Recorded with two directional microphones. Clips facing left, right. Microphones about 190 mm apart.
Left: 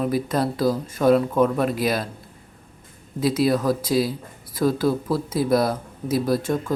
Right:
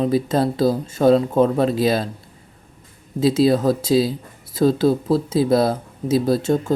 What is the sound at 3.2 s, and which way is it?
Speech, 25° right (ahead or behind).